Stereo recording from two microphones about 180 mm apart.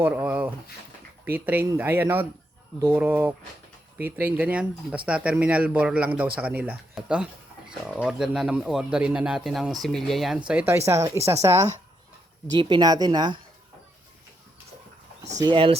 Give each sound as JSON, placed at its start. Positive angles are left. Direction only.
{"t": 0.0, "sound": "a man's voice", "side_deg": -10}
{"t": 15.4, "sound": "speech", "side_deg": -25}